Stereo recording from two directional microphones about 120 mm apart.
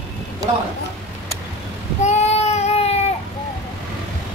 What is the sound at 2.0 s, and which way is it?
Child singing, 65° left (ahead or behind).